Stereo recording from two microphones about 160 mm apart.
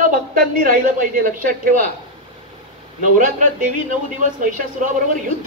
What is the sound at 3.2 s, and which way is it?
Speech, 55° right (ahead or behind).